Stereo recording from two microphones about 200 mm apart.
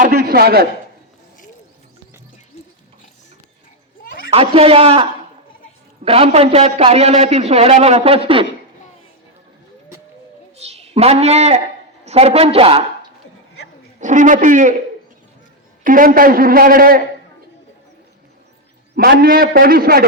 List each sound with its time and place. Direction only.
0.0 s a man's voice: 50° right (ahead or behind)
4.3 s a man's voice: 30° right (ahead or behind)
6.1 s a man's voice: 30° right (ahead or behind)
10.6 s a woman's voice: 30° right (ahead or behind)
14.0 s a man's voice: 40° right (ahead or behind)
15.8 s a man's voice: 45° right (ahead or behind)
18.9 s a man's voice: 50° right (ahead or behind)